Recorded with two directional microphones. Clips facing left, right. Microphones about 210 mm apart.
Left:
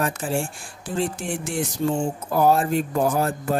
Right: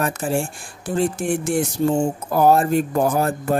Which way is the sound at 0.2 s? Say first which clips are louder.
Right 3 dB; 45° right (ahead or behind).